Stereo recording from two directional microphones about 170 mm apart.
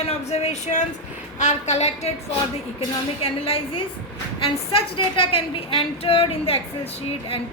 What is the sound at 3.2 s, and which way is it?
A woman's voice, 35° left (ahead or behind).